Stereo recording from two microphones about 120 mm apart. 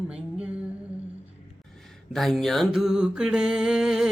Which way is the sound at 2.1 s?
Centre (ahead or behind).